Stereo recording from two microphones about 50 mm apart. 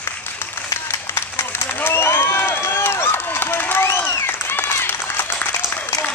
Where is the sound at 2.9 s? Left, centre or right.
Left.